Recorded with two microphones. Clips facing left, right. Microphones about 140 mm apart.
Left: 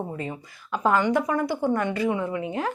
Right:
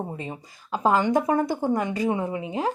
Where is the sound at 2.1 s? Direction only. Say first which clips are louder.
Even; 30° right (ahead or behind).